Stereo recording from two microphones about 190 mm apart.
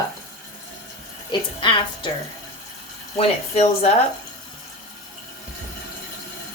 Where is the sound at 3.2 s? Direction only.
35° left (ahead or behind).